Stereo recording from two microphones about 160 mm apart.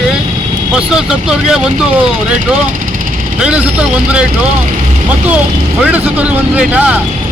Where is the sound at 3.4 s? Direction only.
5° right (ahead or behind).